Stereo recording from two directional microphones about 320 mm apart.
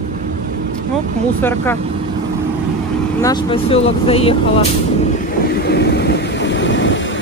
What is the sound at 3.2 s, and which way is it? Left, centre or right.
Speech, centre.